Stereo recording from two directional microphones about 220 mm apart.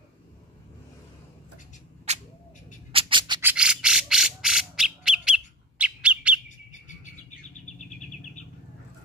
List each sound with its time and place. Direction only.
2.1 s a sound: 30° right (ahead or behind)
2.9 s squawk: 25° right (ahead or behind)
3.4 s bird: 5° right (ahead or behind)